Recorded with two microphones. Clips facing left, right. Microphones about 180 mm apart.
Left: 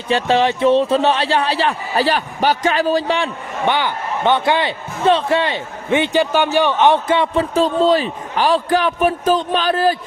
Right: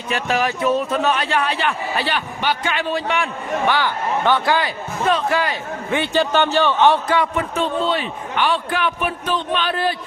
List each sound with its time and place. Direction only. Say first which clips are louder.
0.1 s speech: left 5 dB; 30° left (ahead or behind)
3.7 s speech: left 3 dB; 20° left (ahead or behind); by 9.9 s 40° left (ahead or behind)